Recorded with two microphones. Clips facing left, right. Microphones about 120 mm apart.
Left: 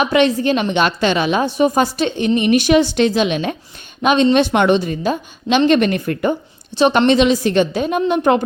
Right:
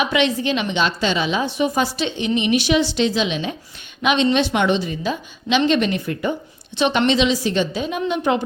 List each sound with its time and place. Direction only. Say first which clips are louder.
0.0 s a woman's voice: left 5 dB; 45° left (ahead or behind)
4.0 s a woman's voice: left 4 dB; 40° left (ahead or behind)
6.7 s a woman's voice: left 5 dB; 40° left (ahead or behind)